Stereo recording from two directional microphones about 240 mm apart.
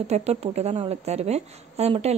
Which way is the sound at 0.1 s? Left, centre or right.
Right.